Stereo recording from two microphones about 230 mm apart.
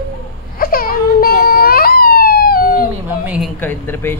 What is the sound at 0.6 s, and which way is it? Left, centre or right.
Police car, left.